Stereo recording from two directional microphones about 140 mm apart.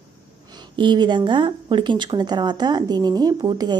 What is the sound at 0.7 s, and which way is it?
Speech, 35° right (ahead or behind).